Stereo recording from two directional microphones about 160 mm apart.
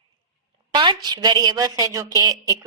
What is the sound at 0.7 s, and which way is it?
A woman's voice, 25° right (ahead or behind).